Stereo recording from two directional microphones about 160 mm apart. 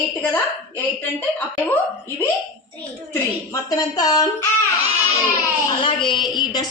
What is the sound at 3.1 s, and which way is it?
A woman's voice, 25° left (ahead or behind).